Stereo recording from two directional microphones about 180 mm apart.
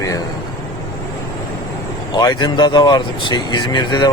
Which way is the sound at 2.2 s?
20° left (ahead or behind).